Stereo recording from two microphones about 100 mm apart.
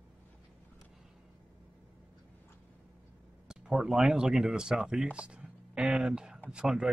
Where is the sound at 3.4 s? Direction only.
5° right (ahead or behind).